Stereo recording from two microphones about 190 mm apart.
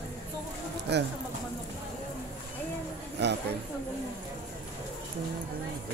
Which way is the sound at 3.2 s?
65° right (ahead or behind).